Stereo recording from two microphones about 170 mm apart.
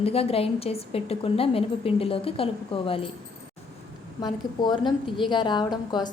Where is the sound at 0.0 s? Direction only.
35° left (ahead or behind).